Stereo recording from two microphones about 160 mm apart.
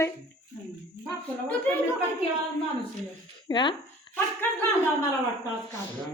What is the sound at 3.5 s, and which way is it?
Speech, 30° left (ahead or behind).